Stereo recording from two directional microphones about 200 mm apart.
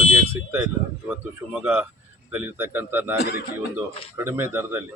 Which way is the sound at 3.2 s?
55° left (ahead or behind).